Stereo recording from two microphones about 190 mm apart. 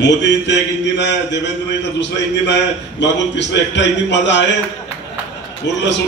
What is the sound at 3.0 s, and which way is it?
A man's voice, 65° left (ahead or behind).